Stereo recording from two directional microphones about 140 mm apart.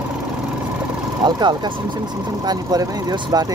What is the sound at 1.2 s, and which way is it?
Speech, 30° right (ahead or behind).